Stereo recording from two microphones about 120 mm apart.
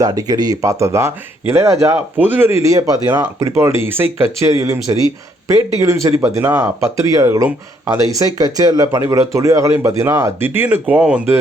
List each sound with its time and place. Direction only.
0.0 s speech: 30° right (ahead or behind)
2.1 s speech: 15° right (ahead or behind)
6.2 s speech: 10° right (ahead or behind)
6.9 s speech: 30° right (ahead or behind); by 11.2 s 10° right (ahead or behind)